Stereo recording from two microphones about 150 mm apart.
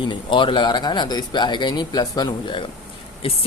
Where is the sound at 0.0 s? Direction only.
30° left (ahead or behind).